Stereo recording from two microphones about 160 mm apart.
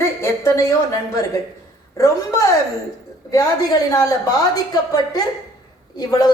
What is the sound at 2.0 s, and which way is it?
Speech, 20° left (ahead or behind).